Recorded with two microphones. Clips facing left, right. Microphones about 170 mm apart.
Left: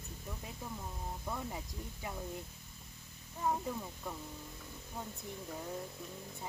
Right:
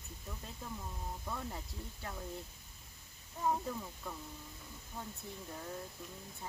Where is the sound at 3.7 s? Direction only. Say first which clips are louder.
Left 1 dB; 10° left (ahead or behind).